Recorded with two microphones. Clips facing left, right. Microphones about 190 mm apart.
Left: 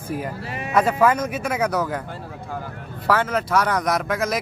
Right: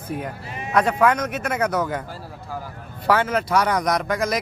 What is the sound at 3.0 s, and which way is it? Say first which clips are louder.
Speech: right 1 dB; centre (ahead or behind).